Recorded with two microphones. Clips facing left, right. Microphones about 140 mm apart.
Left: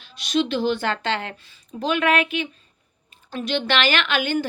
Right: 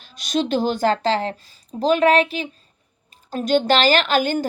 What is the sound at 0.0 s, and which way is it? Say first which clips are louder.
A woman's voice: even; 45° right (ahead or behind).